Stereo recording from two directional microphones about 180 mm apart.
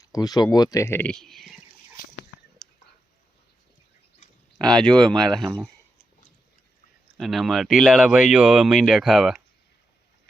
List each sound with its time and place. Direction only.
0.0 s speech: 20° left (ahead or behind); by 1.5 s centre (ahead or behind)
4.7 s speech: 5° left (ahead or behind)
7.2 s speech: centre (ahead or behind)